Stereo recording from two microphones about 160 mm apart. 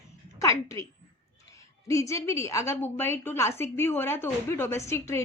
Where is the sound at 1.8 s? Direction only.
20° left (ahead or behind).